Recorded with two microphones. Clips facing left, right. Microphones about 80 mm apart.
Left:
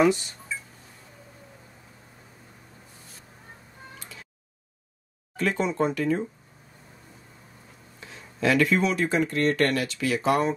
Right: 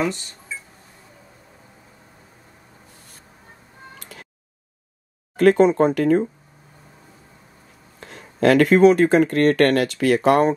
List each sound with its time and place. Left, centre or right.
0.0 s speech: centre
4.0 s a sound: right
5.3 s speech: right
8.0 s speech: right